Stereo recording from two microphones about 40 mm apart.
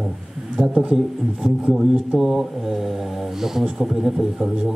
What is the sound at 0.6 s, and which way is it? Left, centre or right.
Speech, right.